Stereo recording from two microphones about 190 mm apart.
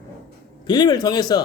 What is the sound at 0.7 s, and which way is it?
Speech, 20° left (ahead or behind).